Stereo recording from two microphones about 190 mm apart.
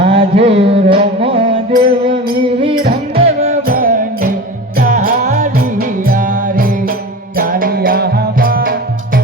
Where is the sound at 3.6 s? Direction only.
45° right (ahead or behind).